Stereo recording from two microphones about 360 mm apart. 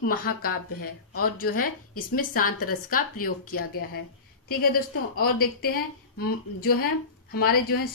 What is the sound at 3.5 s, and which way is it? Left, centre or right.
A woman's voice, left.